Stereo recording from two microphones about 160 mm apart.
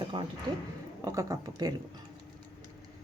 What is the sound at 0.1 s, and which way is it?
A woman's voice, 30° right (ahead or behind).